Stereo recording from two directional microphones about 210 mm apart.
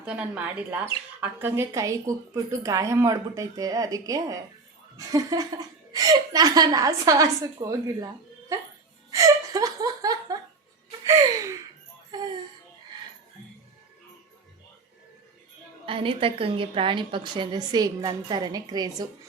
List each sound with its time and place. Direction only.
0.0 s speech: 5° right (ahead or behind)
9.0 s laughter: 15° right (ahead or behind)
11.0 s gasp: 15° right (ahead or behind)
12.1 s music: 20° right (ahead or behind)
15.9 s a woman's voice: 25° right (ahead or behind)